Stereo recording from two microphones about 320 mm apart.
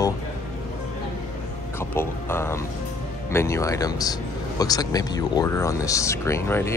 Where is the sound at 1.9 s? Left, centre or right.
Centre.